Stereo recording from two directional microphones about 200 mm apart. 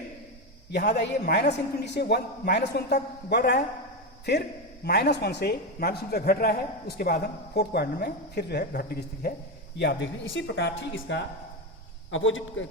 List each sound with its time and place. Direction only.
0.7 s a woman's voice: 50° left (ahead or behind)
9.7 s a woman's voice: 60° left (ahead or behind)